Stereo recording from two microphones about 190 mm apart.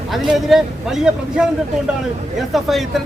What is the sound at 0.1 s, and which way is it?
Speech, centre (ahead or behind).